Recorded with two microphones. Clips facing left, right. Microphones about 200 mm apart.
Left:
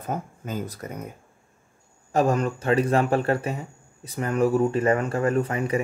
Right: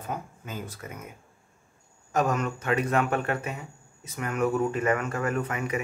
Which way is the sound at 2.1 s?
30° left (ahead or behind).